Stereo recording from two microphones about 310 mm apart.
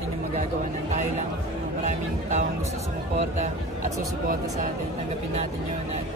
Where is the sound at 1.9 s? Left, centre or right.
Right.